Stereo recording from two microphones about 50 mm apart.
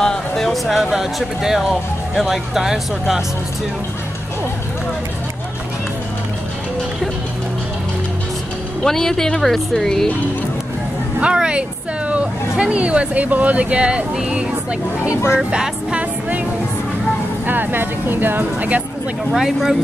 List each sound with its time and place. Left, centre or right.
0.0 s a sound: centre
0.5 s speech: centre
8.8 s speech: centre
11.3 s a woman's voice: centre
15.3 s speech: centre
17.5 s speech: right
18.4 s speech: right
19.3 s speech: centre